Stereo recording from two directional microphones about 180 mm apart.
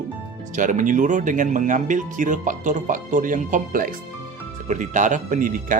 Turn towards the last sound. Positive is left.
turn(degrees=-45)  # may be behind; listen again after turning